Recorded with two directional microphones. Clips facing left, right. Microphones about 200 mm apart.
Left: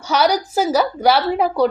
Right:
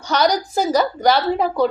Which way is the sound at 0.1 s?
5° left (ahead or behind).